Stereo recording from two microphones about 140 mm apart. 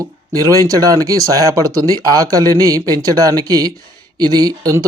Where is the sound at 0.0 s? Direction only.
25° right (ahead or behind).